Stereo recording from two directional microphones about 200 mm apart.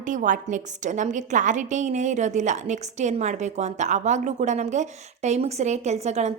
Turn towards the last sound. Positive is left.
turn(degrees=-35)  # may be behind; listen again after turning